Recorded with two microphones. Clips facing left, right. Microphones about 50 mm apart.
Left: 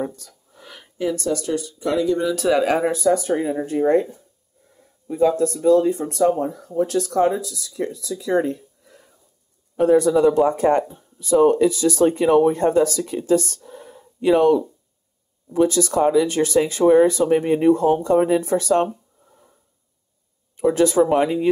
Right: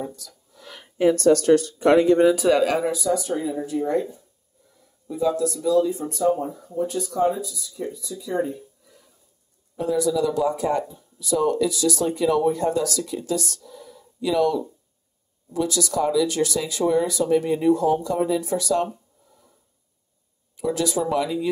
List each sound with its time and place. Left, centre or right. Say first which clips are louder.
0.0 s a sound: left 5 dB; left
1.1 s speech: right 9 dB; right
2.3 s speech: even; centre
2.6 s speech: left 2 dB; left
2.9 s speech: left 5 dB; left
9.8 s speech: left 7 dB; left
20.5 s speech: left 8 dB; left